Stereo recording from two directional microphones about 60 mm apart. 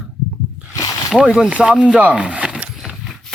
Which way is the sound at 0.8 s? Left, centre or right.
Left.